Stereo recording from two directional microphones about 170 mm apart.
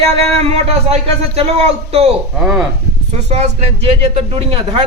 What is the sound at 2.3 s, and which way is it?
Speech, centre (ahead or behind).